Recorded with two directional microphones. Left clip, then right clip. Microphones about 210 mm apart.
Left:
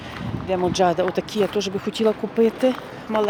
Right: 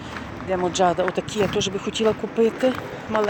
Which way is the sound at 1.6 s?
55° left (ahead or behind).